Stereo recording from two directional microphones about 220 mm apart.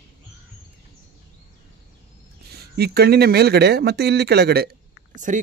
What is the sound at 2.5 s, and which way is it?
Speech, 45° right (ahead or behind).